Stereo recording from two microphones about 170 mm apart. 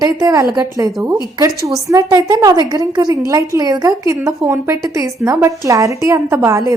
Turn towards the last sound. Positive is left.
turn(degrees=-15)  # may be behind; listen again after turning